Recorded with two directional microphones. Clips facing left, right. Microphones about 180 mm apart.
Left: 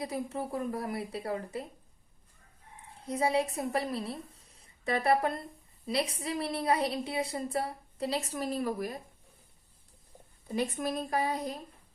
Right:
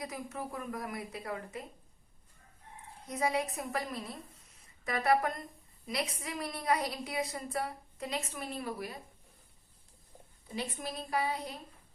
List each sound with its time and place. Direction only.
0.0 s a woman's voice: 30° left (ahead or behind)
3.1 s a woman's voice: 30° left (ahead or behind)
10.5 s speech: 50° left (ahead or behind)